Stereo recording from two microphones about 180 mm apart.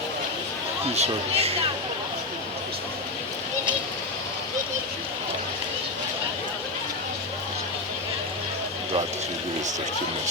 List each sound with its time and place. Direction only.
0.9 s speech: 35° right (ahead or behind)